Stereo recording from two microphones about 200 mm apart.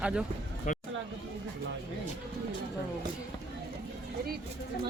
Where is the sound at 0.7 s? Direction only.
40° left (ahead or behind).